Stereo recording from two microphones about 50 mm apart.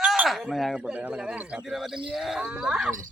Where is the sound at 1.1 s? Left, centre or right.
Centre.